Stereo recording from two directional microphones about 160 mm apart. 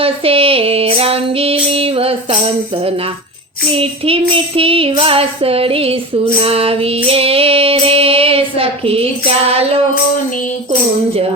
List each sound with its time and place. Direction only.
0.0 s music: 35° right (ahead or behind)
3.8 s music: 35° right (ahead or behind)